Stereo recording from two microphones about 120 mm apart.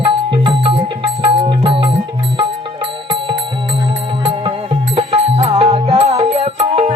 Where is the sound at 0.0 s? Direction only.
40° right (ahead or behind).